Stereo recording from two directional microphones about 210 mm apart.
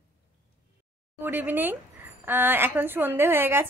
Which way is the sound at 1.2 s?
10° right (ahead or behind).